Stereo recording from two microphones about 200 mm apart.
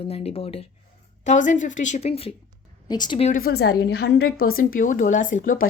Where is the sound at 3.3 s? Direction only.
50° left (ahead or behind).